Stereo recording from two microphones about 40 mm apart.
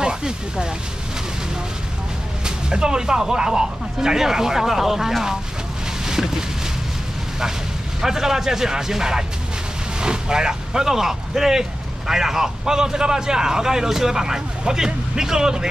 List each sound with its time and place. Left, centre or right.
0.0 s speech: centre
2.4 s speech: centre
6.0 s a sound: centre
8.0 s speech: centre